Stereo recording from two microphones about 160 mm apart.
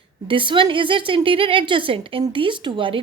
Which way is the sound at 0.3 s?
30° right (ahead or behind).